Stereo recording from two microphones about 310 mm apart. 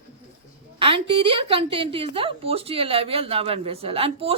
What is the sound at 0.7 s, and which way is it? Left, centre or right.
A woman's voice, centre.